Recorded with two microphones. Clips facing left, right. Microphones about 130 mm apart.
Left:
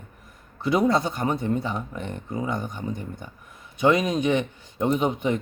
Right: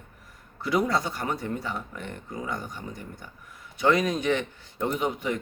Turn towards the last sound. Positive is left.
turn(degrees=20)  # may be behind; listen again after turning